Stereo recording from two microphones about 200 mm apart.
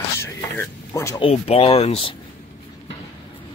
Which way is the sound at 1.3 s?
30° left (ahead or behind).